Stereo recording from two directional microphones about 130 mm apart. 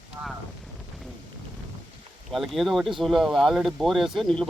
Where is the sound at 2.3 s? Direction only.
Centre (ahead or behind).